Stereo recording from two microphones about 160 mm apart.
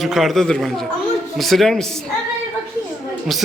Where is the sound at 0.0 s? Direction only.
Centre (ahead or behind).